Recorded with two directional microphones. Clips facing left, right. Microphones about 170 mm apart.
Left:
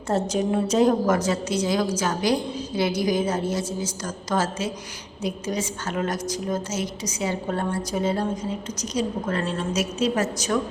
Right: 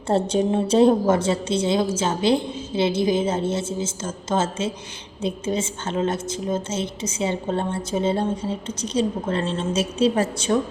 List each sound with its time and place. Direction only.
0.1 s a woman's voice: 30° right (ahead or behind)